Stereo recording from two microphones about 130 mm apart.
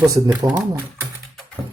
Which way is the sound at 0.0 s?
30° right (ahead or behind).